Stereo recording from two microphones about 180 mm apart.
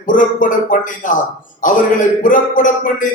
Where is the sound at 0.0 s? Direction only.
45° left (ahead or behind).